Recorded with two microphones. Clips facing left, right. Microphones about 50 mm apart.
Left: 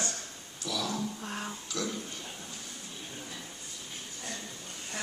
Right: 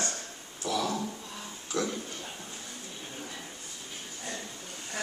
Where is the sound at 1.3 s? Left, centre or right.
Left.